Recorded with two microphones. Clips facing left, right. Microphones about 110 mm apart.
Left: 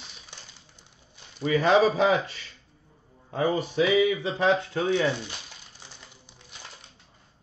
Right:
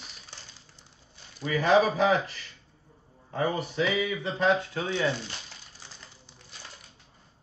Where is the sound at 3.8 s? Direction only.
15° left (ahead or behind).